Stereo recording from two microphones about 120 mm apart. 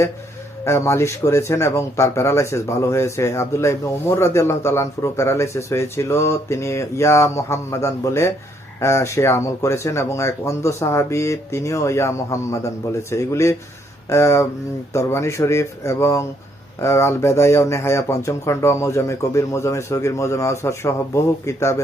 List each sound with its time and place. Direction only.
0.6 s speech: 20° left (ahead or behind)